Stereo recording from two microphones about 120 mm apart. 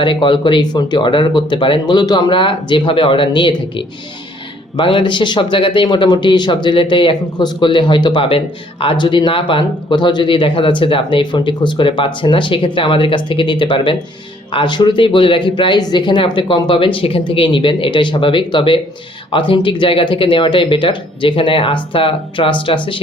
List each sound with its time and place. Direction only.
0.0 s speech: 45° left (ahead or behind)